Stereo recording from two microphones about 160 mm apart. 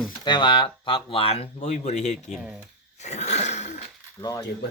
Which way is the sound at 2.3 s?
5° right (ahead or behind).